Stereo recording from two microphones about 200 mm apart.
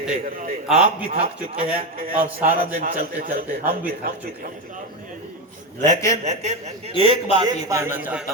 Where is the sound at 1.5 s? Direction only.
45° right (ahead or behind).